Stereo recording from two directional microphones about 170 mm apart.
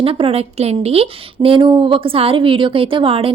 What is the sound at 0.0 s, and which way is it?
A woman's voice, 35° right (ahead or behind).